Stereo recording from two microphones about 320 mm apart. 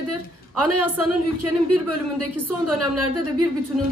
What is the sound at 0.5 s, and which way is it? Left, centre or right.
Speech, right.